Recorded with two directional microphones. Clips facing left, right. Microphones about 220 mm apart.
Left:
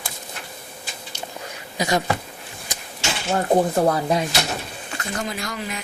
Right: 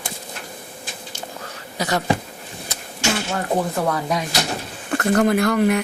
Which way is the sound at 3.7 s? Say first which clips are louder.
Left 3 dB; 30° left (ahead or behind).